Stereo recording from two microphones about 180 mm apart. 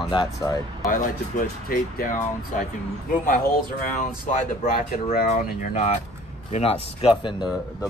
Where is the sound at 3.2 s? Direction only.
45° left (ahead or behind).